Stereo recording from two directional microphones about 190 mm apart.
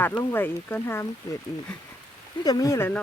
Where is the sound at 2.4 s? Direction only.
20° left (ahead or behind).